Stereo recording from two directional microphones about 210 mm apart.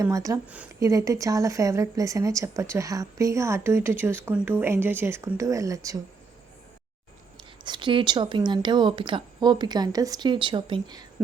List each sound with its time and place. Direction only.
0.0 s speech: 15° right (ahead or behind)
7.6 s a woman's voice: 20° right (ahead or behind)